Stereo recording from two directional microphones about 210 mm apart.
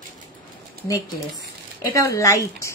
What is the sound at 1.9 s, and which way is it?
Speech, 15° left (ahead or behind).